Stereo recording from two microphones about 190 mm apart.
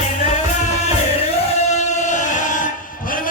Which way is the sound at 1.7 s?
40° left (ahead or behind).